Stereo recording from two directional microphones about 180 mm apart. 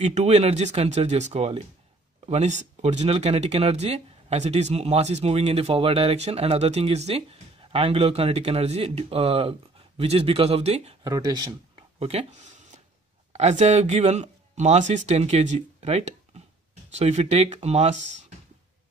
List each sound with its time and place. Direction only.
0.0 s speech: 35° right (ahead or behind)
11.1 s speech: 20° right (ahead or behind)
12.0 s a sound: 35° right (ahead or behind)
13.3 s speech: 35° right (ahead or behind)